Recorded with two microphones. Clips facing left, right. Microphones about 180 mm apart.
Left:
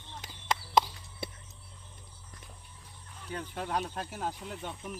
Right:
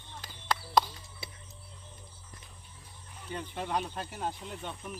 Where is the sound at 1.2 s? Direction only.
60° left (ahead or behind).